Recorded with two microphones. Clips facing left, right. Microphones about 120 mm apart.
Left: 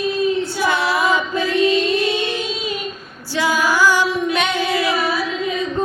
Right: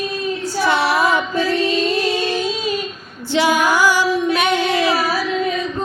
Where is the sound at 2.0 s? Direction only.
35° right (ahead or behind).